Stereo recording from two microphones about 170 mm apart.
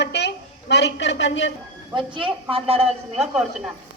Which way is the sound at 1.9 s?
30° right (ahead or behind).